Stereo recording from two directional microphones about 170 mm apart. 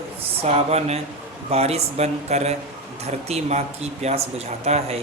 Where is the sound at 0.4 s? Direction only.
40° right (ahead or behind).